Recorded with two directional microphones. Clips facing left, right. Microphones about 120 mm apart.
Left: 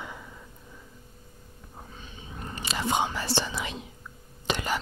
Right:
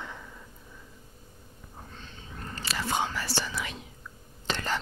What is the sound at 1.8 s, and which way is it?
Whispering, 10° left (ahead or behind).